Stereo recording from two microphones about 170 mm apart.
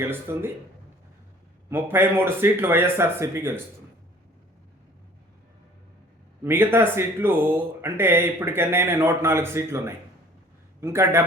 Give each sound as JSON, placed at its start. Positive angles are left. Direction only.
{"t": 0.0, "sound": "speech", "side_deg": -15}
{"t": 1.7, "sound": "speech", "side_deg": -15}
{"t": 6.4, "sound": "speech", "side_deg": -15}